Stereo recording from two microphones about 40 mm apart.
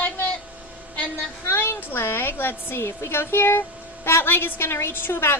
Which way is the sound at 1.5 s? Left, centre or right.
Left.